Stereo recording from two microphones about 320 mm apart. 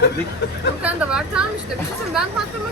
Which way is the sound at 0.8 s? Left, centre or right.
Centre.